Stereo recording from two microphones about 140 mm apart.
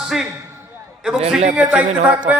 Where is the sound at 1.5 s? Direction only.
10° right (ahead or behind).